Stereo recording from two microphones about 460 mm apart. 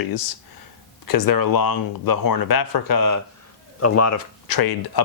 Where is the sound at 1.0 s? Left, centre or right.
Left.